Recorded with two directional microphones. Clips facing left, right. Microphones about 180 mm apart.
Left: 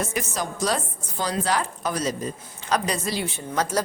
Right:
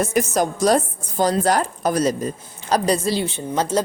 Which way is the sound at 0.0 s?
45° right (ahead or behind).